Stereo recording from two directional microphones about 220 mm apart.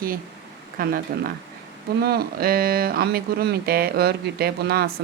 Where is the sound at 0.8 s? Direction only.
40° right (ahead or behind).